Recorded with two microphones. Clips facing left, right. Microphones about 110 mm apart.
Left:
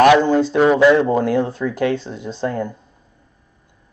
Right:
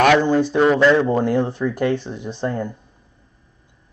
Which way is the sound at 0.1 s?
15° left (ahead or behind).